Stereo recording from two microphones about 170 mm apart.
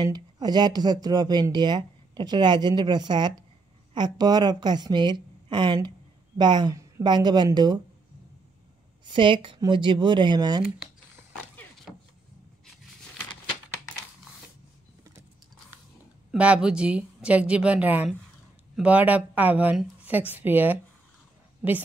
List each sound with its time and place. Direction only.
0.0 s a woman's voice: 25° right (ahead or behind)
9.0 s speech: 30° right (ahead or behind)
11.9 s vehicle: centre (ahead or behind)
16.3 s speech: 5° right (ahead or behind)